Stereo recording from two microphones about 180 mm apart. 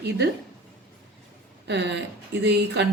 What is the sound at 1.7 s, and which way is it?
A woman's voice, 75° right (ahead or behind).